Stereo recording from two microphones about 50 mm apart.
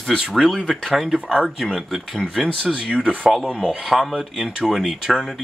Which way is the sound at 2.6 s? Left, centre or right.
Centre.